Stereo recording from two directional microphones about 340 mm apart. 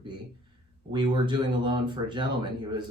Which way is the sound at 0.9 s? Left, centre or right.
Centre.